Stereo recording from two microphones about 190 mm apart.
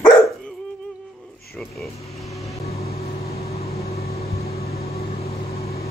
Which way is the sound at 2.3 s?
15° left (ahead or behind).